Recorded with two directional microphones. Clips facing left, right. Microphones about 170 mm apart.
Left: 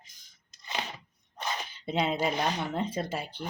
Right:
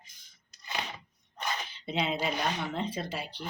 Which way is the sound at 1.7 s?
50° left (ahead or behind).